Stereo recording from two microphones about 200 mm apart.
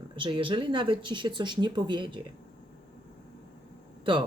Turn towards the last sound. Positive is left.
turn(degrees=-25)  # may be behind; listen again after turning